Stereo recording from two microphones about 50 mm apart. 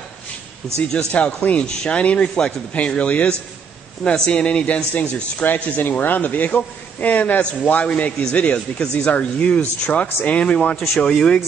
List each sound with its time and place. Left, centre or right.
0.7 s a man's voice: left